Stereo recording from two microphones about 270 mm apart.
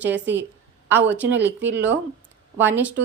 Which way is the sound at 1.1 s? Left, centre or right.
Right.